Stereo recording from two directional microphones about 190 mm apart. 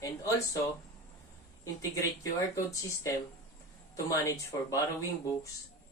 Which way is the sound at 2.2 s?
15° left (ahead or behind).